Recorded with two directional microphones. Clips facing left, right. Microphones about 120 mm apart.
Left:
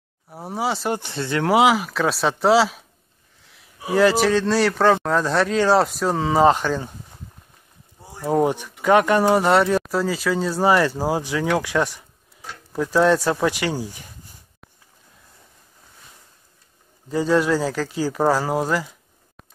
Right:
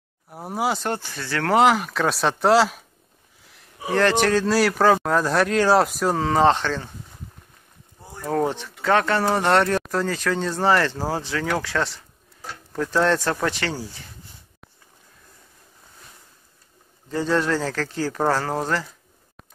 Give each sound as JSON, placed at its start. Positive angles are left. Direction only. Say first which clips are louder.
{"t": 0.3, "sound": "speech", "louder": "even", "side_deg": 0}
{"t": 0.9, "sound": "speech", "louder": "left 4 dB", "side_deg": 20}
{"t": 1.5, "sound": "speech", "louder": "even", "side_deg": 5}
{"t": 8.0, "sound": "speech", "louder": "left 4 dB", "side_deg": 10}
{"t": 17.1, "sound": "speech", "louder": "left 3 dB", "side_deg": 10}